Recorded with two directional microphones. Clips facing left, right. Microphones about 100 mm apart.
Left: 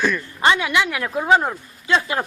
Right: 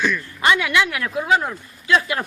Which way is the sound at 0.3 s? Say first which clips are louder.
Even; 25° left (ahead or behind).